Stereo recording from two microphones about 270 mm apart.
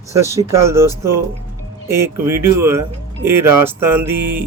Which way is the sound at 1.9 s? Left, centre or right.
Centre.